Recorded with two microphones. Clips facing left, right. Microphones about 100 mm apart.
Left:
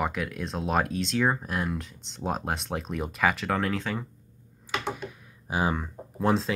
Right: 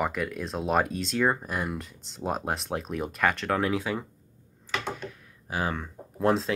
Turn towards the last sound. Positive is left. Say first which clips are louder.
# right 1 dB
turn(degrees=0)  # may be behind; listen again after turning